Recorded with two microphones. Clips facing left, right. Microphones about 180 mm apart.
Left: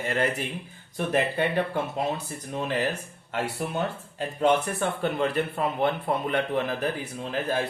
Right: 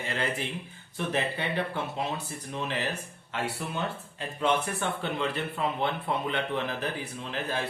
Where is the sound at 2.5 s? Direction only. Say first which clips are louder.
Left 5 dB; 45° left (ahead or behind).